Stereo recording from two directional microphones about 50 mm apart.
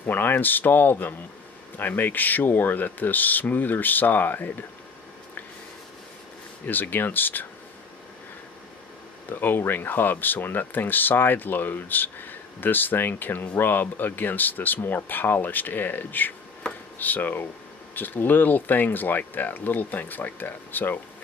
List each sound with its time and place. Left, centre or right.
0.0 s speech: left
6.6 s speech: left
9.3 s speech: left